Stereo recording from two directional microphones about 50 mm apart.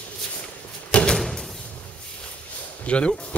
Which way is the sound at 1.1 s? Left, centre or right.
Centre.